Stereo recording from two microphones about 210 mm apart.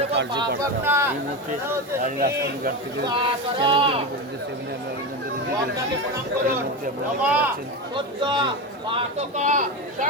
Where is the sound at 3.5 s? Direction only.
25° right (ahead or behind).